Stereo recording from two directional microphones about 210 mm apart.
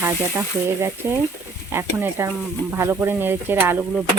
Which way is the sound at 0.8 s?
10° right (ahead or behind).